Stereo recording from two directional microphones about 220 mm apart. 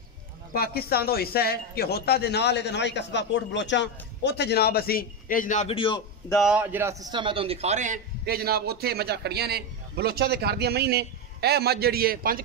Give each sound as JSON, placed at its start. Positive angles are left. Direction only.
{"t": 0.5, "sound": "speech", "side_deg": 45}
{"t": 6.3, "sound": "a man's voice", "side_deg": -5}